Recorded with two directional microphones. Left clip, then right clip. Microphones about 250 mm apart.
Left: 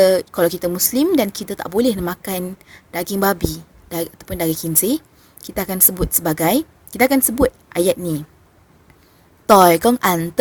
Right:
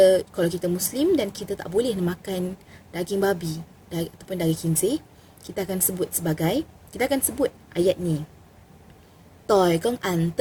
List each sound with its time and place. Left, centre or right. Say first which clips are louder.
0.0 s speech: left 4 dB; left
9.5 s speech: left 9 dB; left